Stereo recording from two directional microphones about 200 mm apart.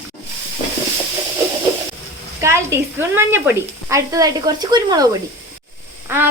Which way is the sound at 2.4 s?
15° right (ahead or behind).